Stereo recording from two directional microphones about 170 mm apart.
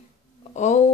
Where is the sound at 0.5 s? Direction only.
45° left (ahead or behind).